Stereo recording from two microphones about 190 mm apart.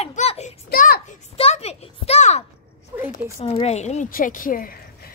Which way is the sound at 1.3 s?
35° left (ahead or behind).